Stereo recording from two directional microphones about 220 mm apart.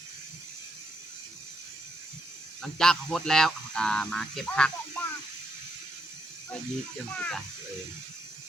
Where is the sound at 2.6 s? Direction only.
Centre (ahead or behind).